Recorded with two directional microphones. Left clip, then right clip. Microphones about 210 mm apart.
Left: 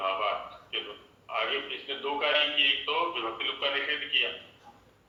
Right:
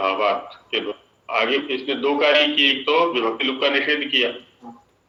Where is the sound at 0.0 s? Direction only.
55° right (ahead or behind).